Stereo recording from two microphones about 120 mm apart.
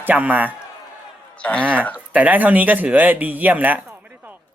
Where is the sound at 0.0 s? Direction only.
15° right (ahead or behind).